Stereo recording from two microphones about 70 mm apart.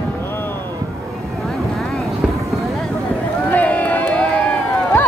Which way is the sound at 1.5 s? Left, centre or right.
Centre.